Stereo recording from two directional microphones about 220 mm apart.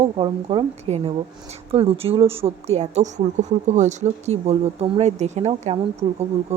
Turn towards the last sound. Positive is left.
turn(degrees=-30)  # may be behind; listen again after turning